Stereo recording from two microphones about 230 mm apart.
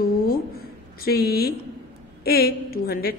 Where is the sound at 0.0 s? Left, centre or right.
Left.